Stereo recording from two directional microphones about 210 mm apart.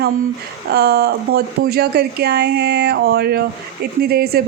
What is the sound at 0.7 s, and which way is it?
A woman's voice, 50° right (ahead or behind).